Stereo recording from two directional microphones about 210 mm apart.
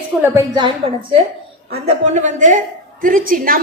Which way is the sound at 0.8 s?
25° right (ahead or behind).